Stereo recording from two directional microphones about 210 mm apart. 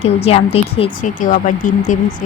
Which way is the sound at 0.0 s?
30° left (ahead or behind).